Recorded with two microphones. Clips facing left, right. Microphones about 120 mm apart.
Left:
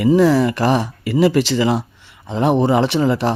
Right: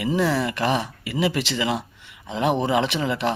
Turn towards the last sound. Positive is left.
turn(degrees=35)  # may be behind; listen again after turning